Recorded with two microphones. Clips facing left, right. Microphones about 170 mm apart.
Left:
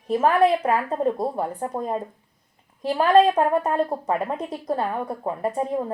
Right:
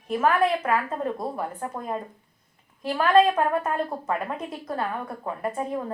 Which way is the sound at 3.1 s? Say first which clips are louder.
Left 2 dB; 35° left (ahead or behind).